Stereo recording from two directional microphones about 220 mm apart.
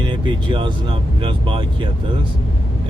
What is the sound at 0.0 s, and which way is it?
Speech, 20° right (ahead or behind).